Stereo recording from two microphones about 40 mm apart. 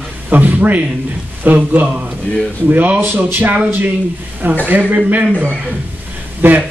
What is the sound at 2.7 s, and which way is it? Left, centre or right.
Speech, right.